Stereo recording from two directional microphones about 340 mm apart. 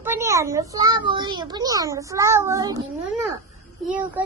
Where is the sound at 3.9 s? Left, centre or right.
Centre.